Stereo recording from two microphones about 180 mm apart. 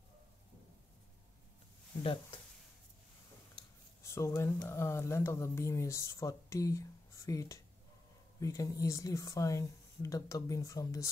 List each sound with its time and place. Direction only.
4.0 s speech: 15° left (ahead or behind)